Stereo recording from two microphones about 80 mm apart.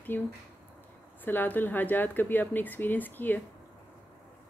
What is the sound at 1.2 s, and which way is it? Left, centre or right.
Speech, left.